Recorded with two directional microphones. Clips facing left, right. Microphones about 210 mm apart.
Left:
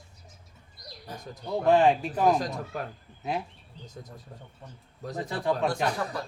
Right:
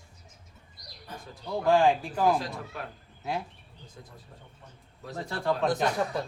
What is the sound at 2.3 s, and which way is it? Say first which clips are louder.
Speech: left 3 dB; 45° left (ahead or behind).